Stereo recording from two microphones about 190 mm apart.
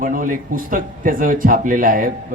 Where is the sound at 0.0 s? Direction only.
45° right (ahead or behind).